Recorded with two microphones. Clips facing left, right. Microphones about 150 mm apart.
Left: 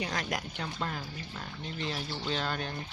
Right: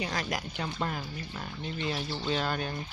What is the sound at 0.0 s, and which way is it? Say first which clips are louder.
Speech: right 1 dB; centre (ahead or behind).